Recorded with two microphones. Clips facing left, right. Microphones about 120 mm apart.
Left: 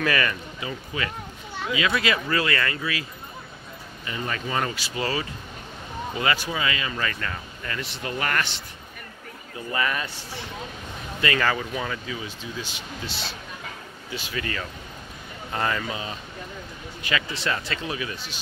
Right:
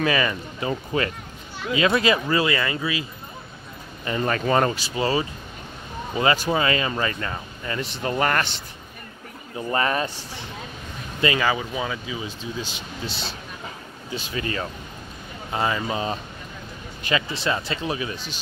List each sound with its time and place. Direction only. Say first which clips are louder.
0.0 s speech: right 2 dB; 20° right (ahead or behind)
0.6 s speech: right 6 dB; 40° right (ahead or behind)
2.2 s speech: right 3 dB; 20° right (ahead or behind)
4.0 s speech: right 7 dB; 45° right (ahead or behind)
4.7 s speech: right 4 dB; 25° right (ahead or behind)
6.5 s speech: right 6 dB; 40° right (ahead or behind)
7.1 s speech: right 3 dB; 25° right (ahead or behind)
9.6 s speech: right 4 dB; 35° right (ahead or behind)
11.3 s speech: right 1 dB; 10° right (ahead or behind)
12.2 s speech: right 3 dB; 20° right (ahead or behind)
14.1 s speech: right 3 dB; 25° right (ahead or behind)
15.5 s speech: right 2 dB; 15° right (ahead or behind)
15.9 s speech: right 6 dB; 35° right (ahead or behind)
17.1 s speech: right 3 dB; 20° right (ahead or behind)